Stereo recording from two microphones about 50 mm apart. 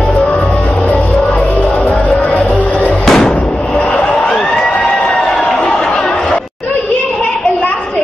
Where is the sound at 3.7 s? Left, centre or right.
Left.